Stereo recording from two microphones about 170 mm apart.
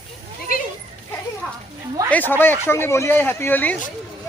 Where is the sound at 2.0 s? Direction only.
10° left (ahead or behind).